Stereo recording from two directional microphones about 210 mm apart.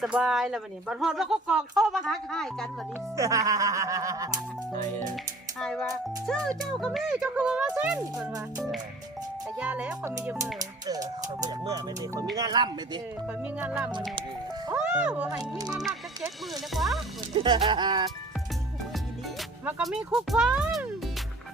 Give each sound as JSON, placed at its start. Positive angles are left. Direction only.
{"t": 0.0, "sound": "speech", "side_deg": 0}
{"t": 3.2, "sound": "speech", "side_deg": -15}
{"t": 4.7, "sound": "speech", "side_deg": -35}
{"t": 5.1, "sound": "speech", "side_deg": 5}
{"t": 9.6, "sound": "speech", "side_deg": -5}
{"t": 13.2, "sound": "speech", "side_deg": -5}
{"t": 15.4, "sound": "speech", "side_deg": -20}
{"t": 16.7, "sound": "speech", "side_deg": 0}
{"t": 17.3, "sound": "speech", "side_deg": -20}
{"t": 19.4, "sound": "speech", "side_deg": 0}